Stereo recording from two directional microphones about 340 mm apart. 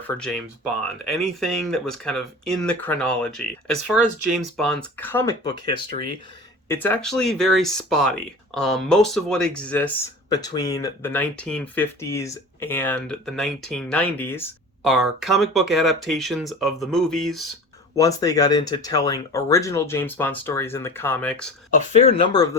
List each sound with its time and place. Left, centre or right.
1.0 s speech: centre
21.9 s speech: centre